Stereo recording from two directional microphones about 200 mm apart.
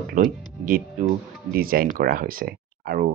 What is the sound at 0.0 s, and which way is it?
Speech, 45° right (ahead or behind).